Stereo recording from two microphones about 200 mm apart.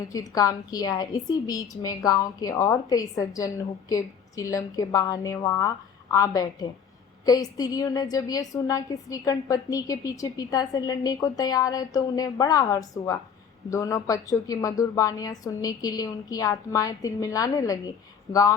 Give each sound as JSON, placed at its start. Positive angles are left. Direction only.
{"t": 0.0, "sound": "a woman's voice", "side_deg": 20}